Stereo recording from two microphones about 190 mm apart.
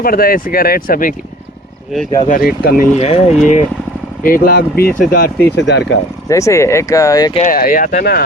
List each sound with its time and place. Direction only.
0.0 s speech: 50° left (ahead or behind)
2.1 s speech: 40° left (ahead or behind)
3.0 s speech: 30° left (ahead or behind); by 5.3 s 50° left (ahead or behind)
5.6 s speech: 65° left (ahead or behind)
6.2 s speech: 15° left (ahead or behind)
7.3 s speech: 45° left (ahead or behind)